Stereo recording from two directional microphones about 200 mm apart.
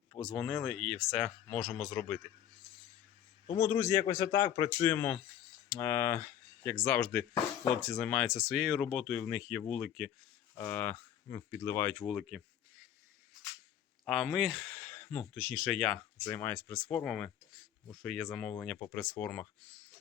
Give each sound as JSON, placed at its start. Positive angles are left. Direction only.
{"t": 0.2, "sound": "speech", "side_deg": 0}
{"t": 3.5, "sound": "speech", "side_deg": 15}
{"t": 14.0, "sound": "speech", "side_deg": 0}